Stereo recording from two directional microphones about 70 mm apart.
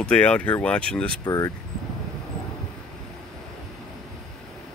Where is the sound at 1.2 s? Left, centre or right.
Left.